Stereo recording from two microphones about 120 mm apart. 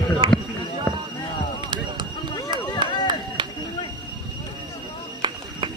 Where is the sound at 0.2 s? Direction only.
50° right (ahead or behind).